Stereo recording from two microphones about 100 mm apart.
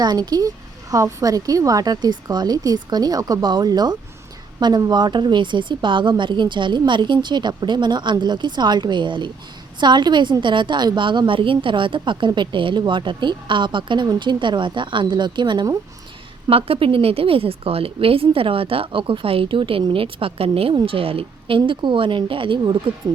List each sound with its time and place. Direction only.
0.0 s a woman's voice: 40° right (ahead or behind)
16.5 s a woman's voice: 70° right (ahead or behind); by 22.8 s 50° right (ahead or behind)